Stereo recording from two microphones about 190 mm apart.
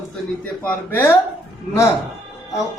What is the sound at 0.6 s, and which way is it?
Speech, 10° left (ahead or behind).